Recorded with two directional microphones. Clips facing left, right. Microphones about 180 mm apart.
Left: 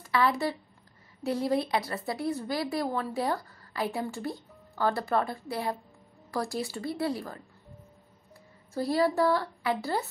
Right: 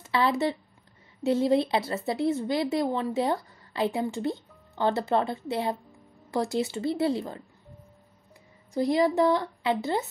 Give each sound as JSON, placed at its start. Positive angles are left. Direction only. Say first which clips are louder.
{"t": 0.0, "sound": "speech", "louder": "right 2 dB", "side_deg": -25}
{"t": 8.7, "sound": "speech", "louder": "right 3 dB", "side_deg": -20}